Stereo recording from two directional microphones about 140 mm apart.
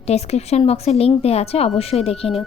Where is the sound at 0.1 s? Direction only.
50° left (ahead or behind).